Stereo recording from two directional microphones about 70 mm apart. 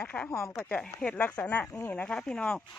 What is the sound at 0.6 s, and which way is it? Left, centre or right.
Speech, centre.